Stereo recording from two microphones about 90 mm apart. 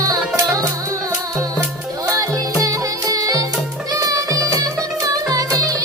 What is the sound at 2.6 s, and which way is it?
Music, 40° right (ahead or behind).